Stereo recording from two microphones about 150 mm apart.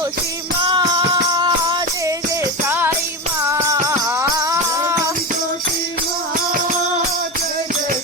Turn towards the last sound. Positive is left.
turn(degrees=-70)  # may be behind; listen again after turning